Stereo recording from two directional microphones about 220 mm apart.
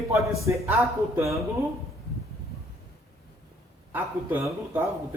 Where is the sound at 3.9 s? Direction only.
10° right (ahead or behind).